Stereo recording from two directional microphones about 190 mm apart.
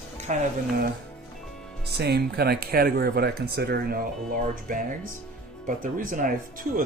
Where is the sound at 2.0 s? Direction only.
55° right (ahead or behind).